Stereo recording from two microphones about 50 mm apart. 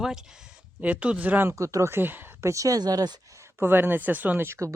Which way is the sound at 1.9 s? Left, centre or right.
Right.